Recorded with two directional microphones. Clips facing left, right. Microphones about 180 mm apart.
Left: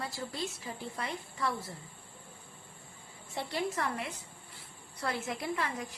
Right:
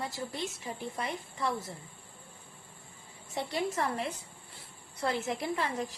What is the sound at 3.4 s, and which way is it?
A woman's voice, 20° right (ahead or behind).